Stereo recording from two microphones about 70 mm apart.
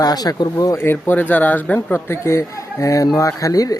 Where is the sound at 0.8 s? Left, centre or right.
Left.